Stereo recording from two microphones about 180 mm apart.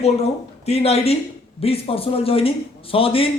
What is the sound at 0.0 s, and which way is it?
A woman's voice, 35° left (ahead or behind).